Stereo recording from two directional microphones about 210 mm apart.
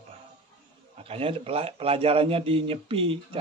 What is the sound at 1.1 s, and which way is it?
Speech, 25° right (ahead or behind).